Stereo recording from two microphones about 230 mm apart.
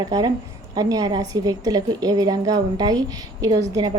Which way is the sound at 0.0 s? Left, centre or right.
Centre.